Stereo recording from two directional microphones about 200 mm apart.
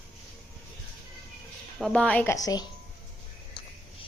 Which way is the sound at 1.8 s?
5° left (ahead or behind).